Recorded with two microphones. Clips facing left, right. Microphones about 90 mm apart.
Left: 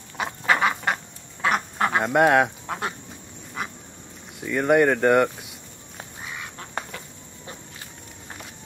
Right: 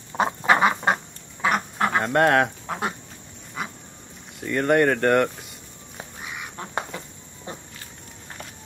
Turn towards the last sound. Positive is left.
turn(degrees=-20)  # may be behind; listen again after turning